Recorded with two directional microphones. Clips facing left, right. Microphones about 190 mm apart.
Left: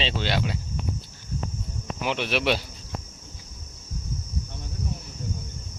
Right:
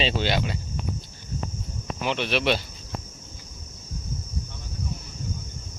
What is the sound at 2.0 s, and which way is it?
Speech, 10° left (ahead or behind).